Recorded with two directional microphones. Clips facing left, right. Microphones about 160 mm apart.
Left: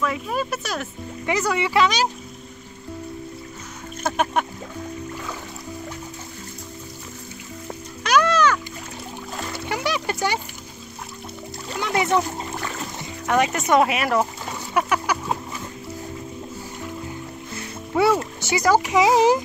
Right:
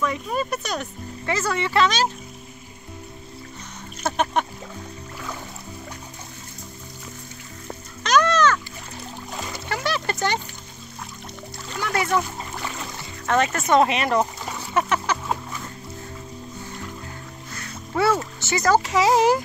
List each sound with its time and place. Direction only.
0.0 s speech: centre (ahead or behind)
1.2 s speech: 15° left (ahead or behind)
4.2 s speech: 5° left (ahead or behind)
8.0 s music: 10° left (ahead or behind)
9.7 s music: 15° left (ahead or behind)
11.8 s speech: 20° left (ahead or behind)
13.3 s speech: 15° left (ahead or behind)
14.7 s a sound: 10° left (ahead or behind)
17.6 s speech: 15° left (ahead or behind)